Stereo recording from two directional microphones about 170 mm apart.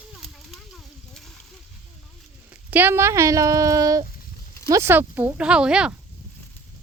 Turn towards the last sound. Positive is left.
turn(degrees=-5)  # may be behind; listen again after turning